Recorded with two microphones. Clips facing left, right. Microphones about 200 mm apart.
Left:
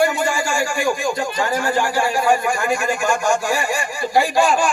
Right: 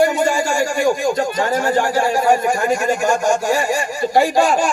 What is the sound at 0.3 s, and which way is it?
A man's voice, 40° right (ahead or behind).